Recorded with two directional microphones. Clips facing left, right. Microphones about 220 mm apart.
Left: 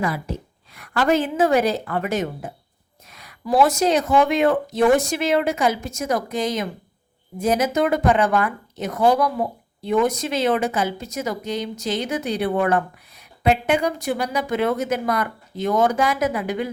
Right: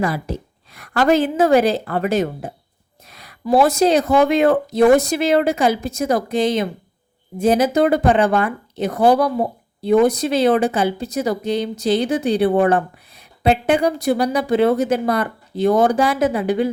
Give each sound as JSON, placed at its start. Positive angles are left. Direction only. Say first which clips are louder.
{"t": 0.0, "sound": "a woman's voice", "louder": "right 3 dB", "side_deg": -35}